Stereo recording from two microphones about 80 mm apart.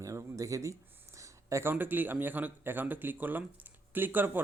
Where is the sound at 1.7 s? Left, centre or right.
Right.